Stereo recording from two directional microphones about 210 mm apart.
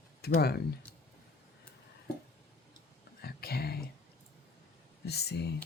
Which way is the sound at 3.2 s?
45° left (ahead or behind).